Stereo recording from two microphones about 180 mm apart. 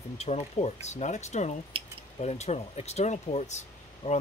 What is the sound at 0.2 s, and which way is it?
Speech, 35° left (ahead or behind).